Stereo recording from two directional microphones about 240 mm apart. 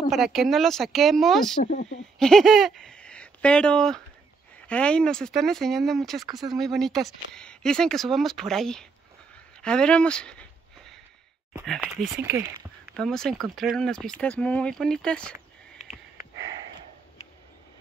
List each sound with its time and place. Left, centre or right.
0.1 s speech: centre
1.6 s speech: left
2.1 s speech: centre
9.6 s a sound: centre
11.6 s speech: centre